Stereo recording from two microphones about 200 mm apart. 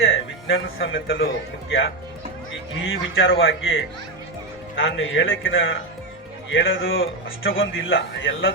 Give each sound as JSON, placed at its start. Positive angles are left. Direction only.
{"t": 0.0, "sound": "speech", "side_deg": 75}
{"t": 2.8, "sound": "a man's voice", "side_deg": 80}
{"t": 4.8, "sound": "a man's voice", "side_deg": 80}